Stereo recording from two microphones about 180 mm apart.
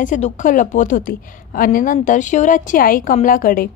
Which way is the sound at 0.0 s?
45° left (ahead or behind).